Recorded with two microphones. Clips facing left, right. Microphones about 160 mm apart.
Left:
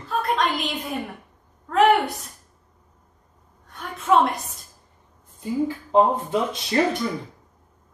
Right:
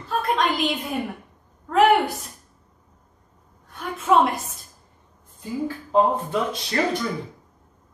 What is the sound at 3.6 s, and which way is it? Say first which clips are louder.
Speech: even; centre (ahead or behind).